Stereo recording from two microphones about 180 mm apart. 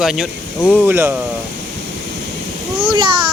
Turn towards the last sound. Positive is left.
turn(degrees=-25)  # may be behind; listen again after turning